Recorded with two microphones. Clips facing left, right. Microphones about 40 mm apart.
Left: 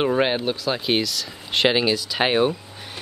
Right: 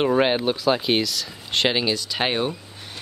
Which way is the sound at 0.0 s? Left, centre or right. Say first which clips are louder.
Right 1 dB; centre.